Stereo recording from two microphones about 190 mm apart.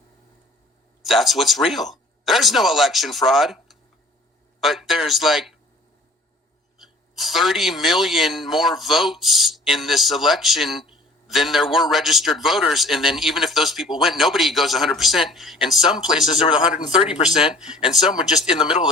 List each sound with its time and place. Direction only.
1.0 s a man's voice: centre (ahead or behind)
6.7 s a man's voice: centre (ahead or behind)
18.4 s speech: 25° left (ahead or behind)